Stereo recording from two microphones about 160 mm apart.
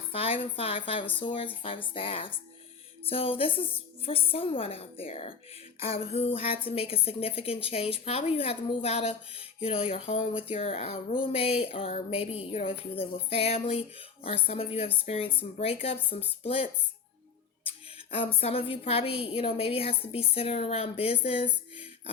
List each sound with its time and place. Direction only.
0.1 s a woman's voice: 35° left (ahead or behind)
17.7 s a sound: 35° left (ahead or behind)
18.7 s speech: 35° left (ahead or behind)